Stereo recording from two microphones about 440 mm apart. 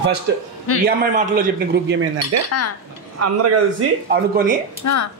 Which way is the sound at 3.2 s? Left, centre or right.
Right.